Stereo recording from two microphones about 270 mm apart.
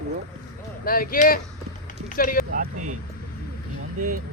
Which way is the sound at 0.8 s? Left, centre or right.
Left.